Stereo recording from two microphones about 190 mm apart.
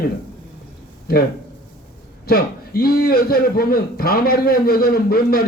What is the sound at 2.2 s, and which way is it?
A man's voice, 55° left (ahead or behind).